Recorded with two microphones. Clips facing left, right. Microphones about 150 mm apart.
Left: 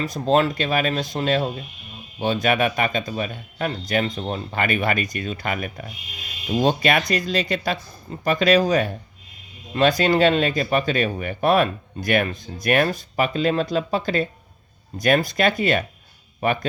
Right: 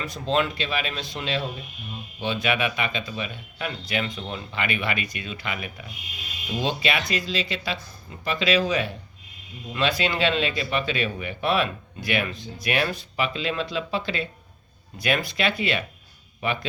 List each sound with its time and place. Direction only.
0.0 s speech: 40° left (ahead or behind)
10.0 s speech: 45° left (ahead or behind)